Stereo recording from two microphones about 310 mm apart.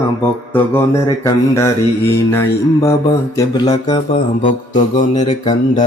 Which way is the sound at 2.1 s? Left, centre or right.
Centre.